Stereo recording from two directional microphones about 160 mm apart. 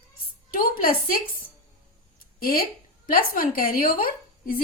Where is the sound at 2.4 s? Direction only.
65° left (ahead or behind).